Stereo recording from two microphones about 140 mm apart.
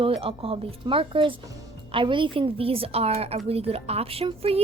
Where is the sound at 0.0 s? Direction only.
40° right (ahead or behind).